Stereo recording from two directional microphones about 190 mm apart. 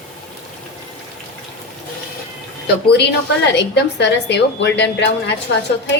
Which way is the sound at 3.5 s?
65° left (ahead or behind).